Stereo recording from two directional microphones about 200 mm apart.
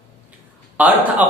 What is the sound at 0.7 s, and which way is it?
Speech, 10° right (ahead or behind).